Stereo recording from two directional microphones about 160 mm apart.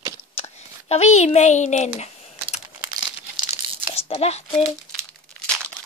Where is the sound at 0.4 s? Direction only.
40° left (ahead or behind).